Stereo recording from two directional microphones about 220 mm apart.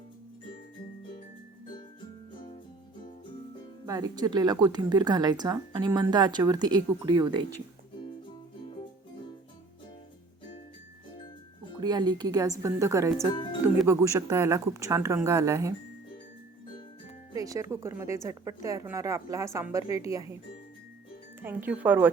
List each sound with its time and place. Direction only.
2.3 s music: 20° left (ahead or behind)
3.8 s speech: 15° right (ahead or behind)
11.8 s speech: 20° right (ahead or behind)
13.3 s speech: 20° left (ahead or behind)
13.8 s speech: 15° right (ahead or behind)
17.3 s speech: 15° right (ahead or behind)
21.4 s speech: 10° right (ahead or behind)